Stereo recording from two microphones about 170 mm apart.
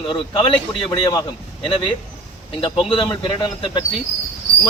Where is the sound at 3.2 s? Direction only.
30° left (ahead or behind).